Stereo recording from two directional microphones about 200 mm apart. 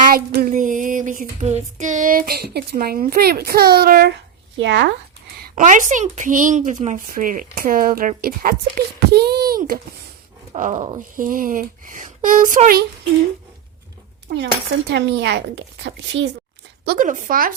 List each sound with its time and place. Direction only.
0.1 s a sound: 50° right (ahead or behind)
1.4 s a woman's voice: 35° right (ahead or behind); by 4.1 s 50° right (ahead or behind)
4.5 s speech: 65° right (ahead or behind)
5.4 s a woman's voice: 40° right (ahead or behind)
10.5 s speech: 35° right (ahead or behind)
14.3 s speech: 55° right (ahead or behind)
16.8 s a woman's voice: 45° right (ahead or behind)